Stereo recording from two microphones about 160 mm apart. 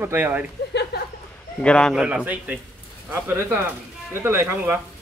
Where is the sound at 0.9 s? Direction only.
90° left.